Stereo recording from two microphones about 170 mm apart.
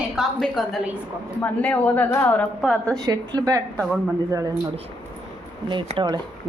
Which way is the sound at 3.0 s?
20° right (ahead or behind).